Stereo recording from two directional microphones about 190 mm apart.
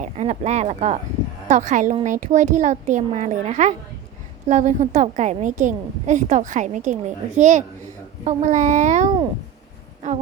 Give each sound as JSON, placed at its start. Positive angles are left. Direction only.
{"t": 0.0, "sound": "a woman's voice", "side_deg": -35}